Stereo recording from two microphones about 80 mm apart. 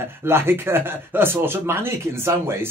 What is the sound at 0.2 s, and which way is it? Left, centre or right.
Speech, right.